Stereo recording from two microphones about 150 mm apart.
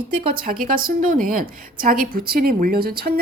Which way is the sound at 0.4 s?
70° right (ahead or behind).